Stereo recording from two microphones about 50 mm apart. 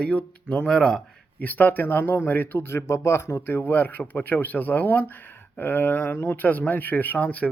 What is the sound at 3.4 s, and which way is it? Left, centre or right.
Speech, left.